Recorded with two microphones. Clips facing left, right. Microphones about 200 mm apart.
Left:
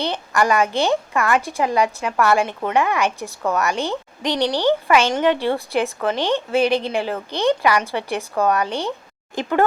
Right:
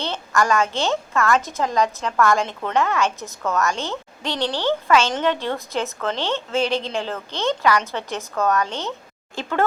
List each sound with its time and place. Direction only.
0.0 s a woman's voice: 15° left (ahead or behind)